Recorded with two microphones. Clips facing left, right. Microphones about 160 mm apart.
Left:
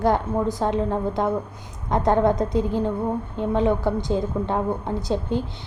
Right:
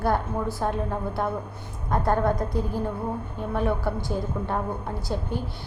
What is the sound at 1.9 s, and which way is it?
Speech, 20° left (ahead or behind).